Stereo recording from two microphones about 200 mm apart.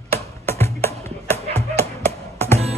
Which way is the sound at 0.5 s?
10° left (ahead or behind).